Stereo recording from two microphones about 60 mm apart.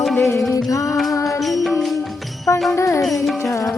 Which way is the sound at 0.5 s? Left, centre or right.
Left.